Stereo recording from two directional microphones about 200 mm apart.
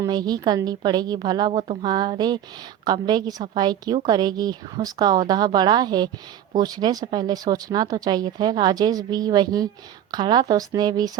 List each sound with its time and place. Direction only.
0.0 s speech: 20° right (ahead or behind)